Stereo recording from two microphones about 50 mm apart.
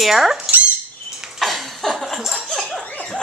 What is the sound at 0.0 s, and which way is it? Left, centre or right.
Speech, centre.